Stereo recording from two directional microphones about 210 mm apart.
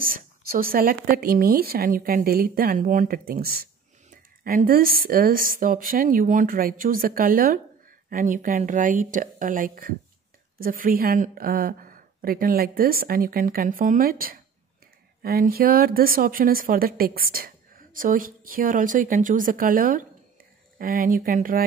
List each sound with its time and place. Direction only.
0.0 s a woman's voice: 45° right (ahead or behind)